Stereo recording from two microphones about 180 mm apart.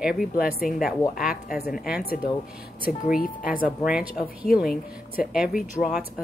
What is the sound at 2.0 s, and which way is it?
Speech, 55° left (ahead or behind).